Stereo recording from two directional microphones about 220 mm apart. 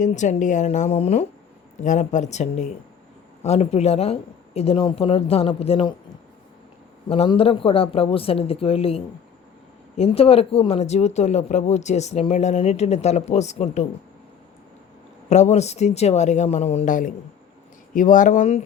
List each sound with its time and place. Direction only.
0.0 s speech: 35° left (ahead or behind)
7.1 s speech: 25° left (ahead or behind)
15.3 s speech: 30° left (ahead or behind)